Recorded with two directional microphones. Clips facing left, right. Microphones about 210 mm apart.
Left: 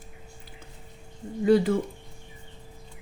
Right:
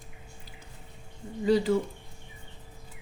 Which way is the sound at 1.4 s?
55° left (ahead or behind).